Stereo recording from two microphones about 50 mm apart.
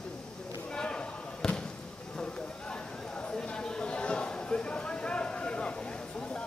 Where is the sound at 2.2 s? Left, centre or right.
Left.